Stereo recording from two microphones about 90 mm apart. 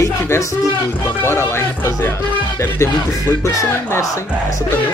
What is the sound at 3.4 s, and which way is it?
Speech, 35° left (ahead or behind).